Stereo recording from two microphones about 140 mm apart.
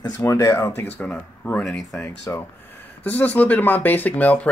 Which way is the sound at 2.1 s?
20° left (ahead or behind).